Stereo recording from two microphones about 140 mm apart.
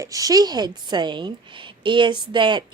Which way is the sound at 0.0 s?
25° right (ahead or behind).